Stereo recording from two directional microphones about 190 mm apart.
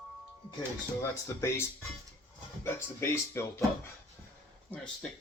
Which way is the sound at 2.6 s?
15° left (ahead or behind).